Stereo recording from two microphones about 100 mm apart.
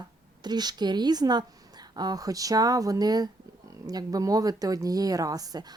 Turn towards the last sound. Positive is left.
turn(degrees=-40)  # may be behind; listen again after turning